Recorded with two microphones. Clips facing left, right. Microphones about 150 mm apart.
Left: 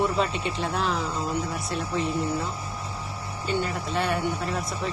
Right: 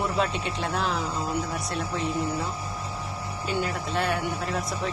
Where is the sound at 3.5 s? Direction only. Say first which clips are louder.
Left 1 dB; 5° right (ahead or behind).